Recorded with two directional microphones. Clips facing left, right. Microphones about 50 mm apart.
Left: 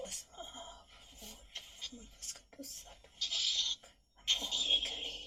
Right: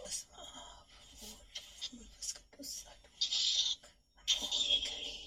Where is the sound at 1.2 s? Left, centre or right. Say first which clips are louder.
Left 1 dB; left.